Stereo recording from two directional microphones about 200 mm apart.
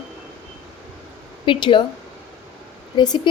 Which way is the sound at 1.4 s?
25° left (ahead or behind).